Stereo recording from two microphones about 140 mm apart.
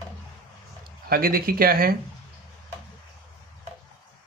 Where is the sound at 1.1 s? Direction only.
90° right.